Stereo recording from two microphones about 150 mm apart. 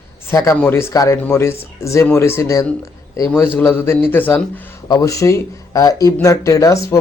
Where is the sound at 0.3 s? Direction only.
20° left (ahead or behind).